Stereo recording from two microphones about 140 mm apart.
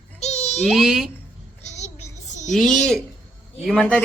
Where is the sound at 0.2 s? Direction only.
50° left (ahead or behind).